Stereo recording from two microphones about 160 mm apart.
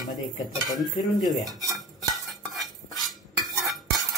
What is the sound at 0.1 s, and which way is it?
Dishes, 25° left (ahead or behind).